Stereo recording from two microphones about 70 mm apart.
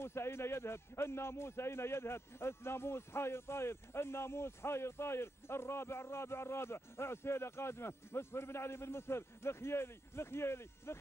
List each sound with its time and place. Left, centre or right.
0.0 s a man's voice: left